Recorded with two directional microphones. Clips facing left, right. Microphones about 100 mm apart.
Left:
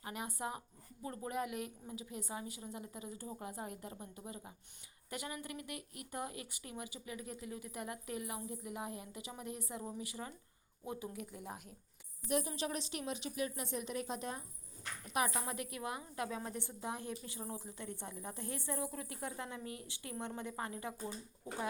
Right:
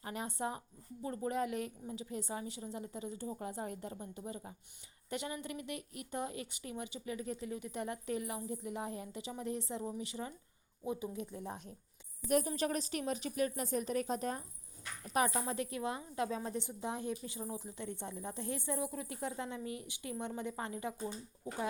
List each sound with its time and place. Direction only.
0.0 s a woman's voice: 30° right (ahead or behind)
12.3 s a woman's voice: 45° right (ahead or behind); by 20.9 s 25° right (ahead or behind)